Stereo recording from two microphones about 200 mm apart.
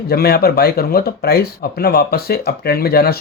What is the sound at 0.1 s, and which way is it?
Speech, 50° left (ahead or behind).